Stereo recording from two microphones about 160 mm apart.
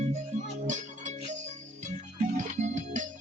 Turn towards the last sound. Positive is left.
turn(degrees=-50)  # may be behind; listen again after turning